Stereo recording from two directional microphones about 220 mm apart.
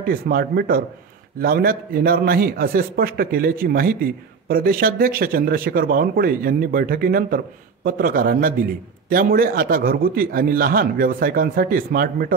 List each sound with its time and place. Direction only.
0.0 s a man's voice: 40° right (ahead or behind)